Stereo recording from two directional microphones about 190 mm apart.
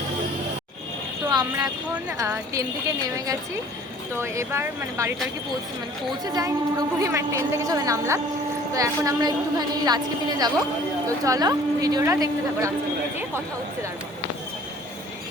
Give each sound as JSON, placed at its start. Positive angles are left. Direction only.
{"t": 1.3, "sound": "a woman's voice", "side_deg": -20}
{"t": 6.2, "sound": "a woman's voice", "side_deg": -20}